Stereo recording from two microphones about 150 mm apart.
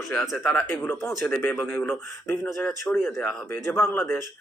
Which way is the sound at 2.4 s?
5° left (ahead or behind).